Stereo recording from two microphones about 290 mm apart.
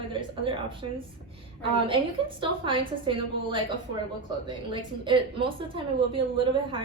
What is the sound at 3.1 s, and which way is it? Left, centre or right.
Speech, centre.